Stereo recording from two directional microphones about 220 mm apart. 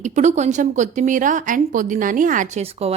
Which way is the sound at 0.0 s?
30° right (ahead or behind).